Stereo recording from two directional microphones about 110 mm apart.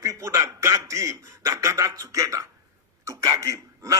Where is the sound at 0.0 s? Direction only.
30° right (ahead or behind).